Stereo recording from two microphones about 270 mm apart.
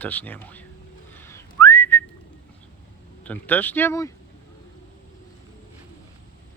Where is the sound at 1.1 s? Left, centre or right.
Centre.